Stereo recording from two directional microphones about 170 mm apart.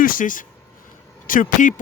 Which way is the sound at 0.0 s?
55° left (ahead or behind).